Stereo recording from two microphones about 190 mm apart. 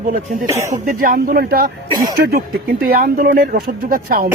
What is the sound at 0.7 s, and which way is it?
Speech, 45° right (ahead or behind).